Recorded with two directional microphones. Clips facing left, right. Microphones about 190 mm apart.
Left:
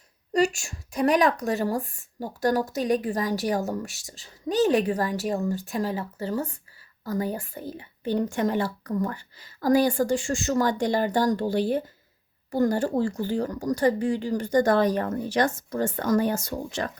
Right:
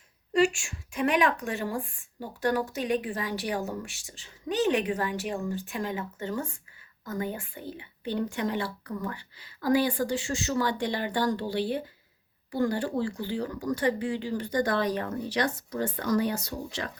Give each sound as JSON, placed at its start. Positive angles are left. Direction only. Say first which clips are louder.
{"t": 0.3, "sound": "a woman's voice", "louder": "left 1 dB", "side_deg": 40}